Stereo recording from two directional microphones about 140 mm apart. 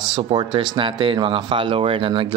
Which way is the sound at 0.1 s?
35° right (ahead or behind).